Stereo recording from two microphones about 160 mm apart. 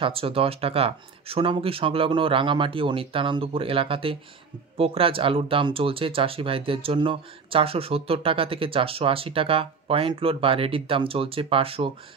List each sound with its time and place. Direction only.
0.0 s speech: 35° right (ahead or behind)